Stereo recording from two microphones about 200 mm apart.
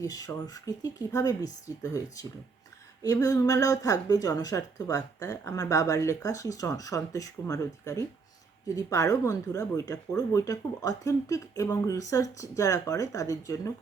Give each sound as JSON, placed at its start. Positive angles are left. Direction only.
{"t": 0.0, "sound": "speech", "side_deg": 15}